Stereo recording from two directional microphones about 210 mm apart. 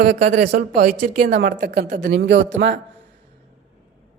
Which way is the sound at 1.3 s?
55° right (ahead or behind).